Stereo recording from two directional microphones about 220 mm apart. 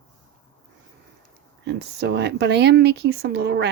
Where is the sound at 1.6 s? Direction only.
50° right (ahead or behind).